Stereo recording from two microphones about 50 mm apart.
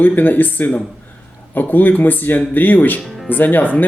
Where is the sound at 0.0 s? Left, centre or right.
Left.